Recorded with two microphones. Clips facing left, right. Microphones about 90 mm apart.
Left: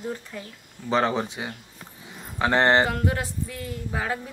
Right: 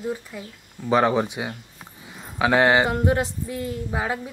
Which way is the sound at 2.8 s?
20° right (ahead or behind).